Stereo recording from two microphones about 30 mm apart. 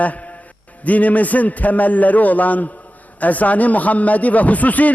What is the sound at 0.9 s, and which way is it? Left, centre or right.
Speech, left.